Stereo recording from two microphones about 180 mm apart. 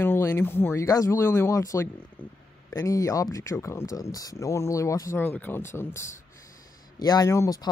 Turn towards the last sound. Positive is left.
turn(degrees=20)  # may be behind; listen again after turning